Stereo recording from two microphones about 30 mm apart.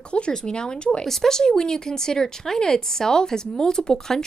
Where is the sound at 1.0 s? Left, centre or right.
Centre.